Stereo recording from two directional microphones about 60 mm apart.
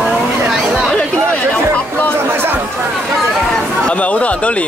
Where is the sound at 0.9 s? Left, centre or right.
Centre.